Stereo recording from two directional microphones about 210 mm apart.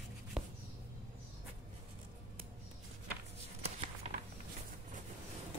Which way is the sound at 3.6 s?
30° right (ahead or behind).